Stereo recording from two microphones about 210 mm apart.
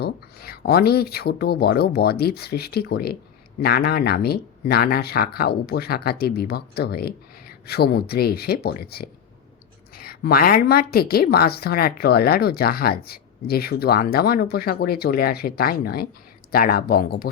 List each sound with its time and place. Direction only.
0.0 s speech: 50° left (ahead or behind)